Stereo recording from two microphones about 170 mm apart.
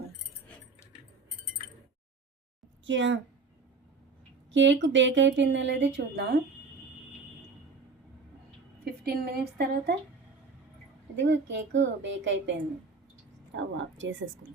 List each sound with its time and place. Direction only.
2.8 s speech: 90° right
4.5 s speech: 90° right
8.8 s a woman's voice: 65° right (ahead or behind)
11.2 s speech: 90° right
13.6 s speech: 90° right